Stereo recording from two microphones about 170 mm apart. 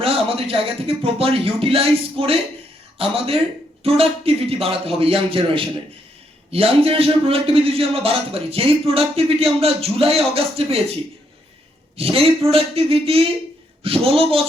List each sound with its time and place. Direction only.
0.0 s a man's voice: 35° right (ahead or behind)
11.9 s a man's voice: 35° right (ahead or behind)